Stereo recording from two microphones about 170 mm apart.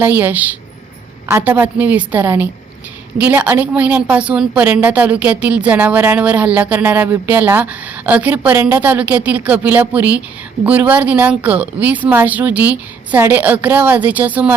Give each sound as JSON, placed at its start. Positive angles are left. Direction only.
{"t": 0.0, "sound": "a woman's voice", "side_deg": -10}